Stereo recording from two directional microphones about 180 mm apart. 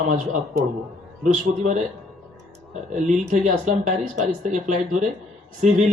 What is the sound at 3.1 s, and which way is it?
A man's voice, 45° right (ahead or behind).